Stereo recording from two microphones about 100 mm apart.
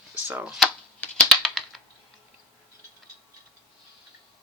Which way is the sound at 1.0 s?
5° left (ahead or behind).